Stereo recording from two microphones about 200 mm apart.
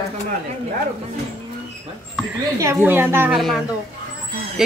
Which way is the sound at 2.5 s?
15° right (ahead or behind).